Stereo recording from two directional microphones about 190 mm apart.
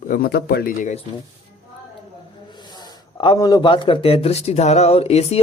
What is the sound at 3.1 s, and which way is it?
Speech, 25° left (ahead or behind).